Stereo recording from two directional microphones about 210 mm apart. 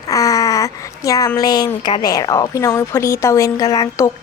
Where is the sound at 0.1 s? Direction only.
15° left (ahead or behind).